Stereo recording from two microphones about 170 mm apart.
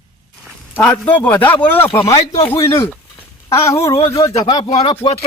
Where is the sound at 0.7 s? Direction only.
5° left (ahead or behind).